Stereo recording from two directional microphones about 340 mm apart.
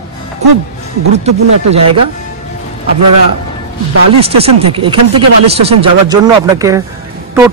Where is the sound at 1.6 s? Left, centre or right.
Right.